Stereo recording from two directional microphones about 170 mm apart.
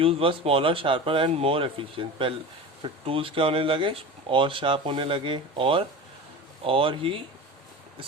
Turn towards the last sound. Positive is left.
turn(degrees=-30)  # may be behind; listen again after turning